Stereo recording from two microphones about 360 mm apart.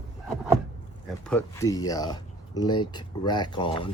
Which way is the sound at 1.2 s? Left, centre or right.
Centre.